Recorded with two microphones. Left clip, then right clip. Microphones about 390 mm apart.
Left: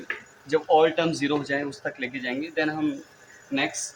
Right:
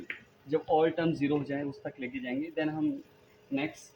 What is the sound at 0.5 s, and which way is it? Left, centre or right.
Speech, right.